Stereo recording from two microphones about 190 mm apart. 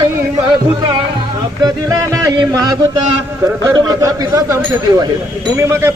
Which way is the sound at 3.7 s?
20° right (ahead or behind).